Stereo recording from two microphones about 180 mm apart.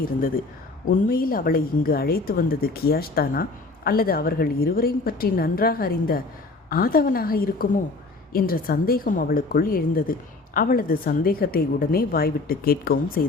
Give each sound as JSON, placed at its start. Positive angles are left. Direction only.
{"t": 0.9, "sound": "a woman's voice", "side_deg": 55}